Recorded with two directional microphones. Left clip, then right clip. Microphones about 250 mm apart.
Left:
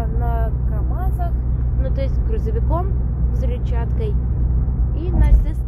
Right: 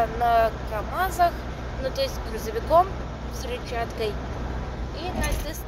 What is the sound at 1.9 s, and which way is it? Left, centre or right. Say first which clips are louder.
Speech: right 1 dB; centre.